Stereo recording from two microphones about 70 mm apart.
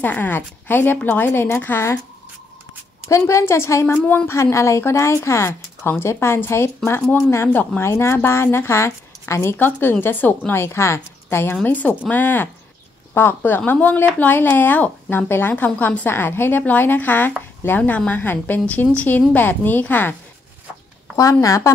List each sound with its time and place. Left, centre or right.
0.0 s a woman's voice: left
3.1 s a woman's voice: left
4.3 s a woman's voice: left
7.8 s a woman's voice: left
11.6 s speech: left
21.2 s speech: left